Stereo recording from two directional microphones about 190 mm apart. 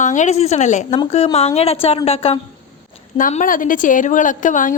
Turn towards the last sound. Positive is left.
turn(degrees=40)  # may be behind; listen again after turning